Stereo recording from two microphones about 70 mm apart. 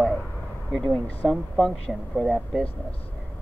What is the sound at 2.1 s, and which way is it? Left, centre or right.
Speech, centre.